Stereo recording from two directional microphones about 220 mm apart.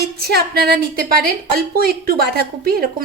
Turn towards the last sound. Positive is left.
turn(degrees=-45)  # may be behind; listen again after turning